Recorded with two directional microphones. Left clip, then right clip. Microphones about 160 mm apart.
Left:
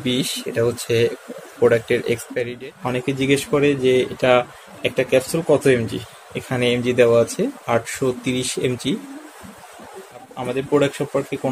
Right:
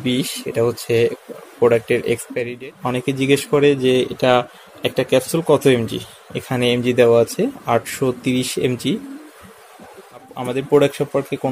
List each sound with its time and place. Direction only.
0.0 s speech: 25° right (ahead or behind)
10.3 s speech: 40° right (ahead or behind)